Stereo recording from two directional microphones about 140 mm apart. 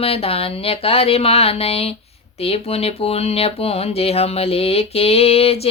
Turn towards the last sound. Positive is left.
turn(degrees=45)  # may be behind; listen again after turning